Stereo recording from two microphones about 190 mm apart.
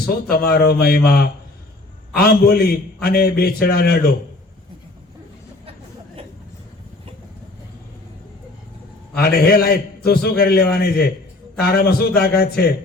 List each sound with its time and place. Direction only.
0.1 s a man's voice: 50° left (ahead or behind)
9.1 s a man's voice: 55° left (ahead or behind)